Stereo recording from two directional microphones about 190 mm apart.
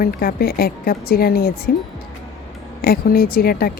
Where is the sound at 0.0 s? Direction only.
50° left (ahead or behind).